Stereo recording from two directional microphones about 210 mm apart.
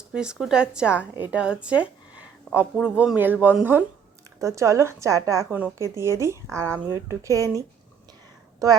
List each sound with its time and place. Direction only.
0.1 s a woman's voice: 5° right (ahead or behind)
8.6 s a woman's voice: 15° right (ahead or behind)